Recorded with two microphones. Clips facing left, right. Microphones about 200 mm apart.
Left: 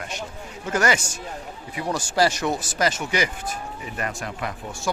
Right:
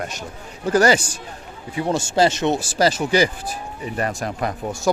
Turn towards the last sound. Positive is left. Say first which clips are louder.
# right 6 dB
turn(degrees=-40)  # may be behind; listen again after turning